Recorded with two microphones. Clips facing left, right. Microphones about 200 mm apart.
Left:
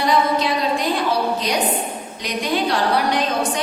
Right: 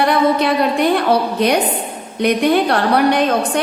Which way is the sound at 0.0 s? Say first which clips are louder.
Right 4 dB; 60° right (ahead or behind).